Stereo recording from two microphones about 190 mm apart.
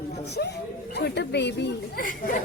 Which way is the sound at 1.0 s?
60° left (ahead or behind).